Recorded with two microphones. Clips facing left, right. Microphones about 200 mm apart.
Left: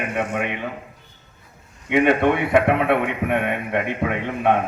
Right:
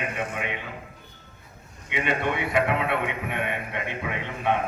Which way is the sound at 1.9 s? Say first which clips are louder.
Left 10 dB; 55° left (ahead or behind).